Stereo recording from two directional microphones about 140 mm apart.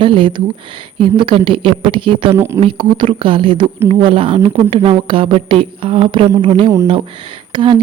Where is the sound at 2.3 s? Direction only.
20° right (ahead or behind).